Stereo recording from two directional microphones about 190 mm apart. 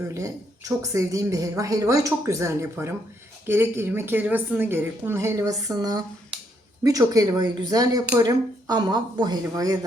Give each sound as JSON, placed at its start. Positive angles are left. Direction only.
{"t": 0.1, "sound": "a woman's voice", "side_deg": -15}